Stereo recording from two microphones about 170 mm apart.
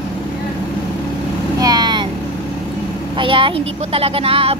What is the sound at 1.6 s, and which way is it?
Vehicle, 25° right (ahead or behind).